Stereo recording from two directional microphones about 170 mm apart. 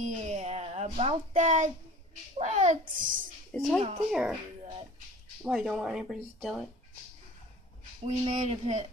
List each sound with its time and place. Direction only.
0.0 s a sound: 40° right (ahead or behind)
2.3 s a child's voice: 45° right (ahead or behind)
3.5 s speech: centre (ahead or behind)
5.4 s speech: 5° right (ahead or behind)
8.0 s speech: 35° right (ahead or behind)